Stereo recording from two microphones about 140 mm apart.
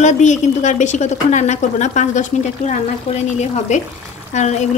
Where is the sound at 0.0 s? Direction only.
60° left (ahead or behind).